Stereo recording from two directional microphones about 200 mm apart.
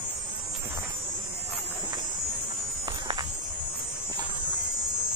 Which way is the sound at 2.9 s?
20° right (ahead or behind).